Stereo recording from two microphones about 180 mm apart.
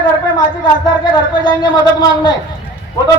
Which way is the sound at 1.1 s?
25° left (ahead or behind).